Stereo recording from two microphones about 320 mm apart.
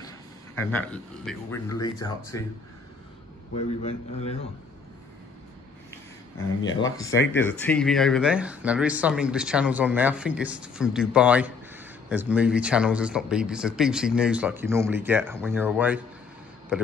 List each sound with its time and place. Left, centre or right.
0.6 s speech: centre
4.2 s a man's voice: centre
6.7 s speech: centre